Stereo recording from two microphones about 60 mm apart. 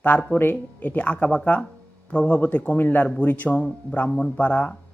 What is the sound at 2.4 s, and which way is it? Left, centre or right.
Speech, left.